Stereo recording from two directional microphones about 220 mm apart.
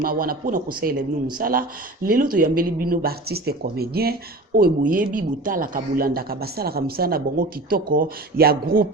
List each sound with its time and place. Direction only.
0.0 s a man's voice: 40° right (ahead or behind)